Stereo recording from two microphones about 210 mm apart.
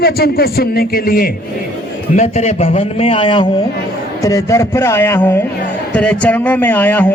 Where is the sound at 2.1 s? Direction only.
35° left (ahead or behind).